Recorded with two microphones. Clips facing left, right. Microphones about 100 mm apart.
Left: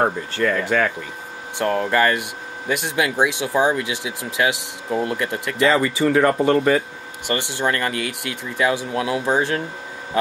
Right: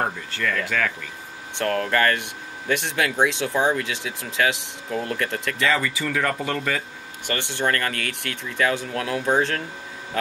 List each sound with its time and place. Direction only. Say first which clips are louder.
0.0 s speech: left 6 dB; 30° left (ahead or behind)
1.6 s speech: left 3 dB; 15° left (ahead or behind)
5.6 s speech: left 7 dB; 30° left (ahead or behind)
7.2 s speech: left 2 dB; 15° left (ahead or behind)